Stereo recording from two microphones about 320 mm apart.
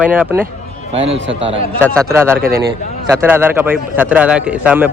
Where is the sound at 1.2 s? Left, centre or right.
Right.